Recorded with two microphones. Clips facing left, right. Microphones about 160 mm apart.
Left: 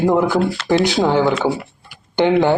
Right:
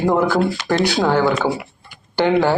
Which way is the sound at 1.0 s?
10° left (ahead or behind).